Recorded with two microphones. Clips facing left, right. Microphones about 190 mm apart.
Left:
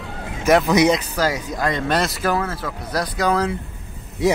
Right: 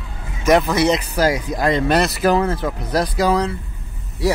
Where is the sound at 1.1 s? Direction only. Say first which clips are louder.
Right 4 dB; 10° right (ahead or behind).